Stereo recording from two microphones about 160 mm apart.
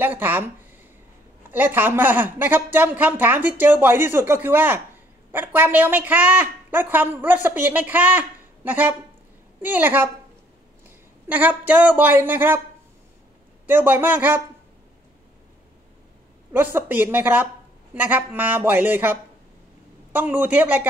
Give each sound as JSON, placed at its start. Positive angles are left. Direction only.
{"t": 0.0, "sound": "a woman's voice", "side_deg": -10}
{"t": 1.5, "sound": "a woman's voice", "side_deg": -10}
{"t": 11.2, "sound": "a woman's voice", "side_deg": -10}
{"t": 13.7, "sound": "a woman's voice", "side_deg": -10}
{"t": 16.5, "sound": "a woman's voice", "side_deg": -10}